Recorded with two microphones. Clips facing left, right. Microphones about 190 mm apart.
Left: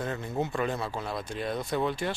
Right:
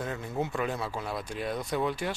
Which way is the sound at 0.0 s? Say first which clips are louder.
Left 2 dB; 5° right (ahead or behind).